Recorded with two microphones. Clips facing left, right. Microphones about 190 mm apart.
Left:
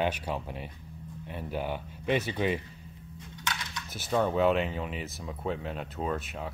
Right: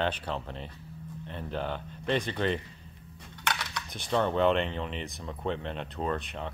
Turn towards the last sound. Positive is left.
turn(degrees=5)  # may be behind; listen again after turning